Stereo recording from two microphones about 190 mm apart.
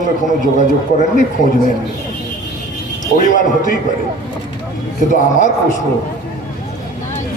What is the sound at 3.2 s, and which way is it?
Speech, 45° left (ahead or behind).